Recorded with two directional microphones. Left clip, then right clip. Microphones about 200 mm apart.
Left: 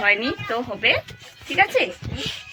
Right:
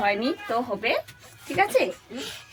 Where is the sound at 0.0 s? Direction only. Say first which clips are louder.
Left 5 dB; 10° right (ahead or behind).